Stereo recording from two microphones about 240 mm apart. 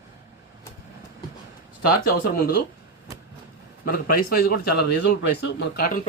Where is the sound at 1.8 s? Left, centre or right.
Left.